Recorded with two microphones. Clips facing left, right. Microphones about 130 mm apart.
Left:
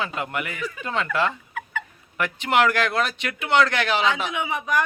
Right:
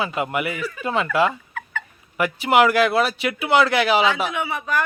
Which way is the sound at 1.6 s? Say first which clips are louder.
Left 1 dB; 10° left (ahead or behind).